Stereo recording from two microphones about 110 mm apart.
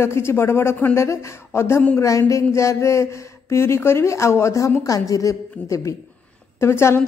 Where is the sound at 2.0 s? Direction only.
30° left (ahead or behind).